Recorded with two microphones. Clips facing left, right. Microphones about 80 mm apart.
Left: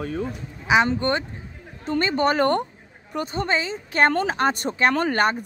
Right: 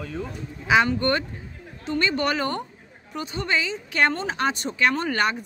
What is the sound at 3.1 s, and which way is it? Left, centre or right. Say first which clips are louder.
A man's voice: left 2 dB; left.